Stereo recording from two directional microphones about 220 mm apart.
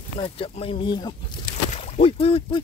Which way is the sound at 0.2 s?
25° left (ahead or behind).